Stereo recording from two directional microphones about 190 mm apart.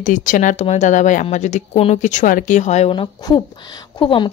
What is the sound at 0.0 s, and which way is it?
A woman's voice, 45° left (ahead or behind).